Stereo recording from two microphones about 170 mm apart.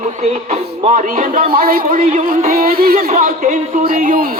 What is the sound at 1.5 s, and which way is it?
Speech, 60° right (ahead or behind).